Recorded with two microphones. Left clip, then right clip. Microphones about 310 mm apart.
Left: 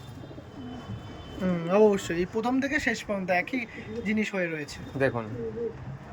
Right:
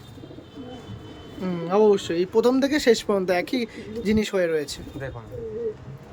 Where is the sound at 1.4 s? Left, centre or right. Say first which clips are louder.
Right 3 dB; centre.